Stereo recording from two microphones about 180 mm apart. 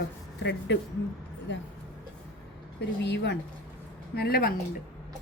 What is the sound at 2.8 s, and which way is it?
Speech, 70° left (ahead or behind).